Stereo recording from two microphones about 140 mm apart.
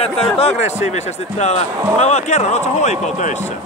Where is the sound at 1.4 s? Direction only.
50° left (ahead or behind).